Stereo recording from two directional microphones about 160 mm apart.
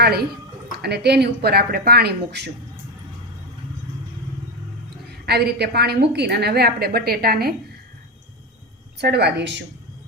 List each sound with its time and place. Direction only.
0.0 s speech: 80° right
0.8 s speech: 90° right
5.2 s a woman's voice: 90° right
9.0 s speech: 90° right